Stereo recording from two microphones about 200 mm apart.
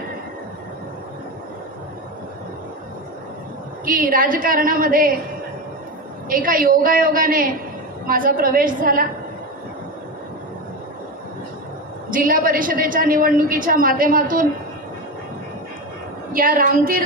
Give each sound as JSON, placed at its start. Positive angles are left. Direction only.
{"t": 3.8, "sound": "a woman's voice", "side_deg": -45}
{"t": 6.2, "sound": "a woman's voice", "side_deg": -45}
{"t": 12.1, "sound": "a woman's voice", "side_deg": -45}
{"t": 16.3, "sound": "a woman's voice", "side_deg": -45}